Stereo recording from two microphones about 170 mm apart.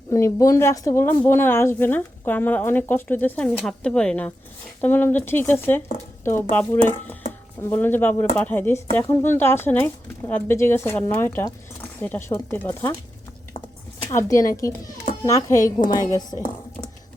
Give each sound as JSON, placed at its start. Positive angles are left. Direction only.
{"t": 0.1, "sound": "speech", "side_deg": 20}
{"t": 14.0, "sound": "speech", "side_deg": 15}